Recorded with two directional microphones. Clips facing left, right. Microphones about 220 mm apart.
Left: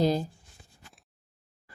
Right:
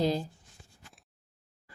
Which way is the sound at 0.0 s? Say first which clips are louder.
Left 3 dB; 40° left (ahead or behind).